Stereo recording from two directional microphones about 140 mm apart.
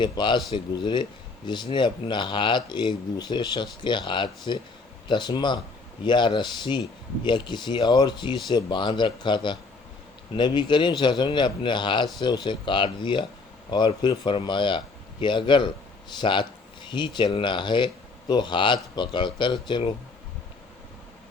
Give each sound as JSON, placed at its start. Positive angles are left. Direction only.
{"t": 0.0, "sound": "speech", "side_deg": 35}